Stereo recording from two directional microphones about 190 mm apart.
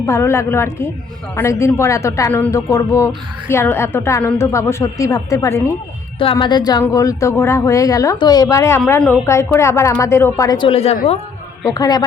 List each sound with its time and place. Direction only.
0.0 s a woman's voice: 15° left (ahead or behind)
10.7 s a woman's voice: 30° left (ahead or behind)
11.6 s a woman's voice: 20° left (ahead or behind)